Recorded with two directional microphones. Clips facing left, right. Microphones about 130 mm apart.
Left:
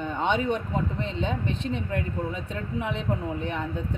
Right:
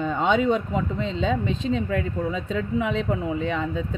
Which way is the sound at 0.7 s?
90° right.